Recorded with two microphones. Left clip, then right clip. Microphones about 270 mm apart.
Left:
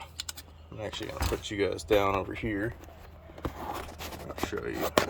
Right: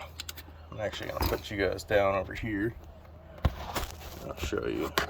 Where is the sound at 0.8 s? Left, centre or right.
Centre.